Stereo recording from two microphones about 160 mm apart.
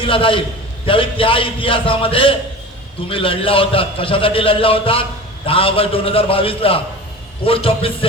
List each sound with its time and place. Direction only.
0.0 s a man's voice: 35° left (ahead or behind)